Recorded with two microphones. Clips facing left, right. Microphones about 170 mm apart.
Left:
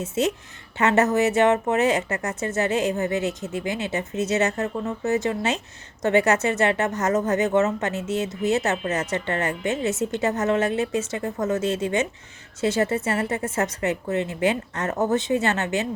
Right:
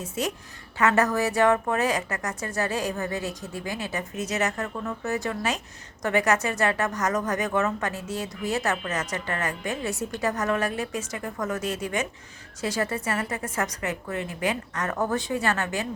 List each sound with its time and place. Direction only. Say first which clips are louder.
0.0 s a woman's voice: left 6 dB; 25° left (ahead or behind)